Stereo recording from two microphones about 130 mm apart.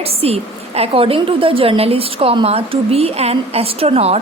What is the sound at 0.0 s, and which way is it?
A woman's voice, 50° right (ahead or behind).